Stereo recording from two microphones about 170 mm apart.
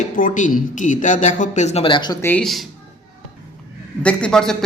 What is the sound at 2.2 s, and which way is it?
Speech, 5° left (ahead or behind).